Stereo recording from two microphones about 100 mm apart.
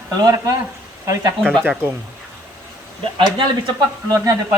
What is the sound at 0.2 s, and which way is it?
Speech, 40° right (ahead or behind).